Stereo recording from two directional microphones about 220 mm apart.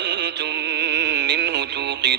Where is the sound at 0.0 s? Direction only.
50° right (ahead or behind).